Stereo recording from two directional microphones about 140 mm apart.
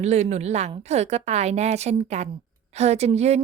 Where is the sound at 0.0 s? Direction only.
50° right (ahead or behind).